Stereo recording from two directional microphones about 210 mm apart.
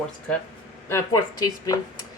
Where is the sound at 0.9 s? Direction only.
15° left (ahead or behind).